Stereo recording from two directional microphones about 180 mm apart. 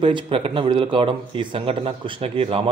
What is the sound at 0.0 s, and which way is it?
A man's voice, 30° right (ahead or behind).